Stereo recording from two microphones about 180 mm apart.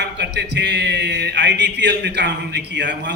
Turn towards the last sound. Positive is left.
turn(degrees=-75)  # may be behind; listen again after turning